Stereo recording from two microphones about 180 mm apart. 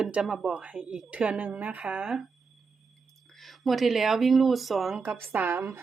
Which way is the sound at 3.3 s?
Centre (ahead or behind).